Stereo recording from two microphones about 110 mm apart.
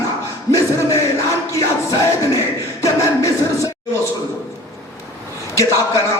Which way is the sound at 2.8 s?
30° left (ahead or behind).